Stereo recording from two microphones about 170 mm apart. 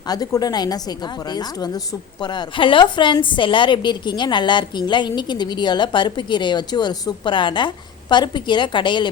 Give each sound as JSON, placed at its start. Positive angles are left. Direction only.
{"t": 0.1, "sound": "a woman's voice", "side_deg": 20}